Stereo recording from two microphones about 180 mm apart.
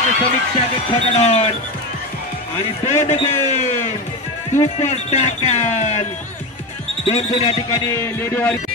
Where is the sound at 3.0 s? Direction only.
35° left (ahead or behind).